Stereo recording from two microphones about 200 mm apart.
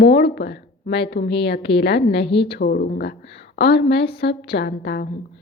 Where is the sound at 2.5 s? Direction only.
50° left (ahead or behind).